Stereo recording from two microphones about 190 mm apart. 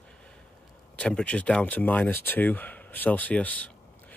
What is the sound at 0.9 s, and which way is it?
Speech, 5° left (ahead or behind).